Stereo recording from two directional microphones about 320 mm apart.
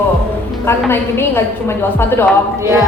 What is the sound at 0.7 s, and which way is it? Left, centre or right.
A woman's voice, centre.